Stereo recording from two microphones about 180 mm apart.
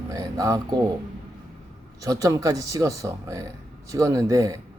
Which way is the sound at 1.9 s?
20° right (ahead or behind).